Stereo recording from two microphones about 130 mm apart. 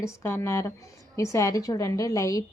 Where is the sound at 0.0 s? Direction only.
20° left (ahead or behind).